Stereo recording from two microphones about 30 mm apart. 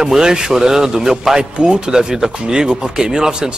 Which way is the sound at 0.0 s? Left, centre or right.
Right.